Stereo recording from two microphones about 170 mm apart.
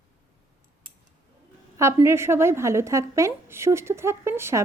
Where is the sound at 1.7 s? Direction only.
15° right (ahead or behind).